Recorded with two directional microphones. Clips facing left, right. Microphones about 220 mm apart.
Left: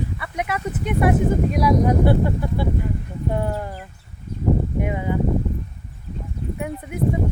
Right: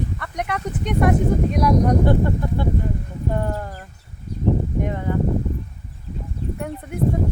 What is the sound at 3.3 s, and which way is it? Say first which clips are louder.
Speech: left 1 dB; 10° left (ahead or behind).